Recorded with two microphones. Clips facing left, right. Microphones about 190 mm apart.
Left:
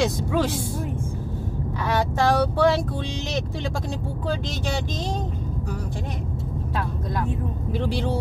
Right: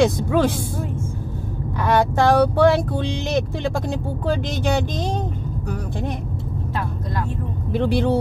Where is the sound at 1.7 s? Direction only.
55° right (ahead or behind).